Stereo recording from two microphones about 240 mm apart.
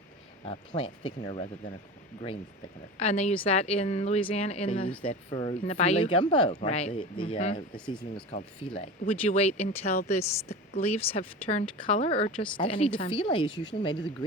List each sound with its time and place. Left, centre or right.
0.4 s speech: left
3.0 s speech: left